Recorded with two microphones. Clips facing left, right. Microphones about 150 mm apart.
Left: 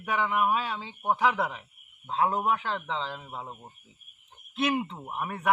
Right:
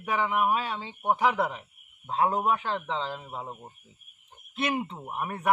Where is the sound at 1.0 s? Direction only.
15° right (ahead or behind).